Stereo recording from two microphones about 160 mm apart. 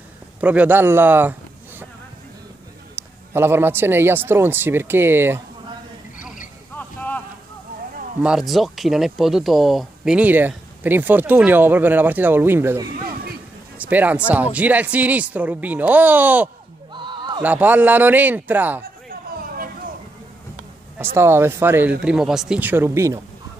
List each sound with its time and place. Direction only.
0.4 s speech: 10° right (ahead or behind)
3.0 s speech: 15° right (ahead or behind)
6.8 s clip-clop: 10° left (ahead or behind)
8.2 s speech: 5° right (ahead or behind)
16.9 s a sound: 30° right (ahead or behind)
17.4 s speech: 10° right (ahead or behind)
19.0 s a sound: 65° right (ahead or behind)
21.0 s speech: 15° right (ahead or behind)